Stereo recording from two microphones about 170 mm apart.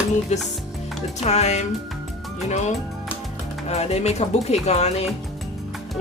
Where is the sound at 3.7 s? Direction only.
40° left (ahead or behind).